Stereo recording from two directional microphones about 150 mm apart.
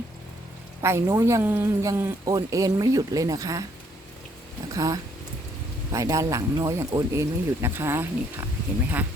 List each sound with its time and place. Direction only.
0.8 s speech: 15° right (ahead or behind)
4.7 s speech: 25° right (ahead or behind)